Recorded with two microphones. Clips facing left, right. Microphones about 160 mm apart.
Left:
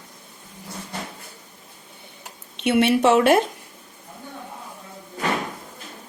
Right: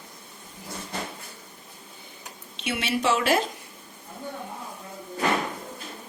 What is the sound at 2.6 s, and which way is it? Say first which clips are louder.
Speech: left 10 dB; 60° left (ahead or behind).